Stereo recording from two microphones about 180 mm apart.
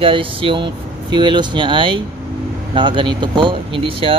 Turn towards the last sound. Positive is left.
turn(degrees=-30)  # may be behind; listen again after turning